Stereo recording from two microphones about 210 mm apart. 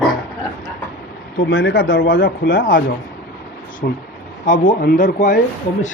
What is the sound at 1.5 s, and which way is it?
Speech, 60° left (ahead or behind).